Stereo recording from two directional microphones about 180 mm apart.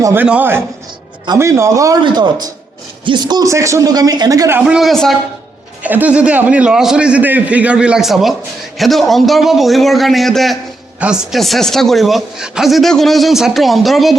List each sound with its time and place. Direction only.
0.0 s a man's voice: 10° right (ahead or behind)
4.6 s a man's voice: centre (ahead or behind)